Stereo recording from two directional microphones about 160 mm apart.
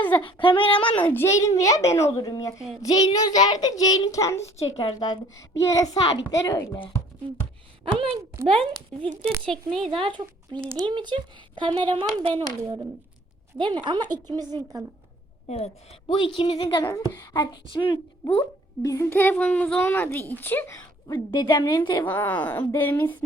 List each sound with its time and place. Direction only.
0.2 s a woman's voice: 30° left (ahead or behind)
1.0 s a woman's voice: 15° left (ahead or behind)
4.5 s a woman's voice: 35° left (ahead or behind)
7.9 s speech: 35° right (ahead or behind)
9.5 s speech: centre (ahead or behind)
9.8 s a woman's voice: 35° right (ahead or behind)
15.4 s a woman's voice: 45° left (ahead or behind)
16.0 s a woman's voice: 30° left (ahead or behind)
16.8 s a child's voice: 20° left (ahead or behind)
22.0 s a woman's voice: 10° left (ahead or behind)